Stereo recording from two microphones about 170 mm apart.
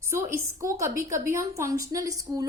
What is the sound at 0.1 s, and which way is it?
A woman's voice, 15° right (ahead or behind).